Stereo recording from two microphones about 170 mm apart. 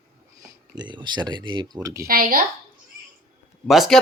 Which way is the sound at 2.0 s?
60° right (ahead or behind).